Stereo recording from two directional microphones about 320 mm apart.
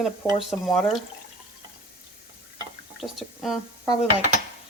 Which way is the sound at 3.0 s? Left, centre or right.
Centre.